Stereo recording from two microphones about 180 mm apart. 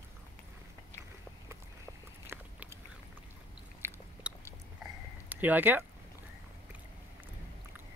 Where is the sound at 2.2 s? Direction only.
15° right (ahead or behind).